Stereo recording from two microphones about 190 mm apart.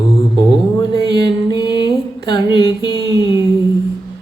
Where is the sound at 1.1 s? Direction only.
20° left (ahead or behind).